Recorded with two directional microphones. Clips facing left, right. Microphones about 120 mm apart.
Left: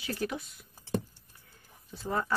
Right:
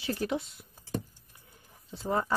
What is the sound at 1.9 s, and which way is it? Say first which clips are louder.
Speech: right 3 dB; 25° right (ahead or behind).